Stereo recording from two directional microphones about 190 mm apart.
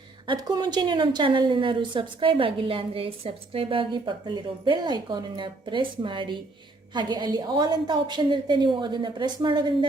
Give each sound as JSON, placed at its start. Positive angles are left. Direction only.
{"t": 0.3, "sound": "a woman's voice", "side_deg": -20}